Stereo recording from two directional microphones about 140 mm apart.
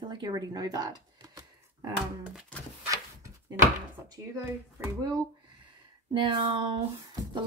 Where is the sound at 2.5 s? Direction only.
10° left (ahead or behind).